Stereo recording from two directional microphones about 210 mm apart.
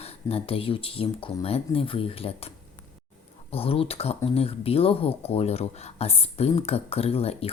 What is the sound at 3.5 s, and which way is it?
Speech, 25° left (ahead or behind).